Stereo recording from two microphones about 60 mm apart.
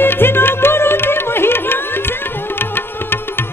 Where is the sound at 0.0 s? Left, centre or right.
Left.